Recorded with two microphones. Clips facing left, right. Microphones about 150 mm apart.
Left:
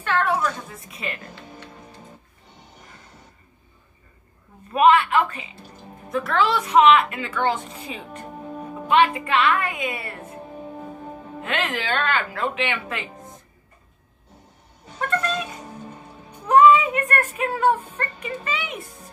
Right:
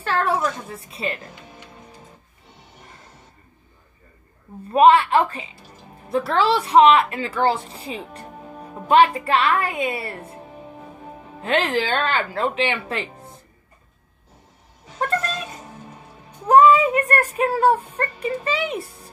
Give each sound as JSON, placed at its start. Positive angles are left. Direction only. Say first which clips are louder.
{"t": 0.0, "sound": "a woman's voice", "louder": "right 1 dB", "side_deg": -35}
{"t": 4.6, "sound": "a woman's voice", "louder": "right 3 dB", "side_deg": -30}
{"t": 11.4, "sound": "a woman's voice", "louder": "right 6 dB", "side_deg": -30}
{"t": 16.4, "sound": "a woman's voice", "louder": "right 1 dB", "side_deg": -35}